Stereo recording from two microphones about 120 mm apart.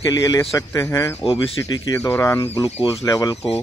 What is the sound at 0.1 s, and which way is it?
A man's voice, 25° left (ahead or behind).